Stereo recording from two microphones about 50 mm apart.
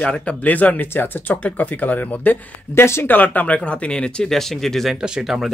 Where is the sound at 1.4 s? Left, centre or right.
Left.